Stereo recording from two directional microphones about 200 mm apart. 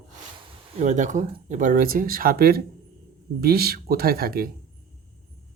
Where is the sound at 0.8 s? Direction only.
35° right (ahead or behind).